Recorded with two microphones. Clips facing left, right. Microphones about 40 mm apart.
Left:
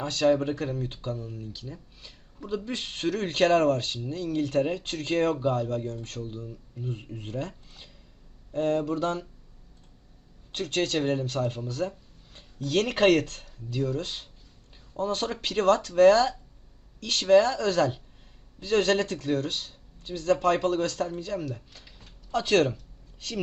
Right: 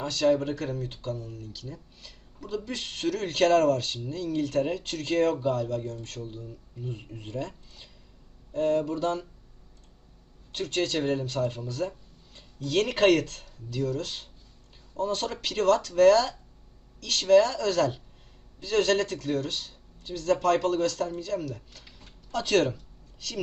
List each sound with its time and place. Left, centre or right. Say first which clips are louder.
0.1 s speech: left 1 dB; left
10.5 s speech: left 1 dB; left